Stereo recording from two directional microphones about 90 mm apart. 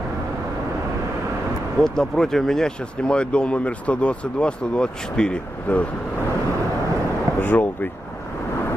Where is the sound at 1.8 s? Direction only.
5° left (ahead or behind).